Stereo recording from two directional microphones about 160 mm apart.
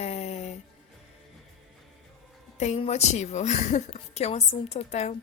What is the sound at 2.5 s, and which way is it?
A woman's voice, 45° left (ahead or behind).